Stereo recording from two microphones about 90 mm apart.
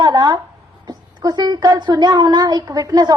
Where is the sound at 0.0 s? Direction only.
55° right (ahead or behind).